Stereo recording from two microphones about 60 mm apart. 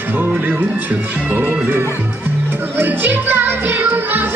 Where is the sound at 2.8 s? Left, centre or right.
Right.